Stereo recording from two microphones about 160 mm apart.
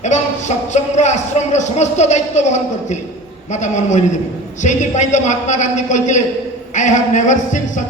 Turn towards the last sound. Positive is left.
turn(degrees=50)  # may be behind; listen again after turning